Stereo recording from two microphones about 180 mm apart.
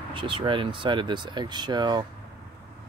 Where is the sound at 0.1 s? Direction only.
30° right (ahead or behind).